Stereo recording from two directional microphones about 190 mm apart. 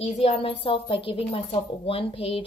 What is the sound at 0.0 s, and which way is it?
A woman's voice, 30° left (ahead or behind).